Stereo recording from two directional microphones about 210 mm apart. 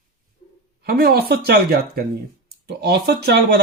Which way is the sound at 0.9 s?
45° right (ahead or behind).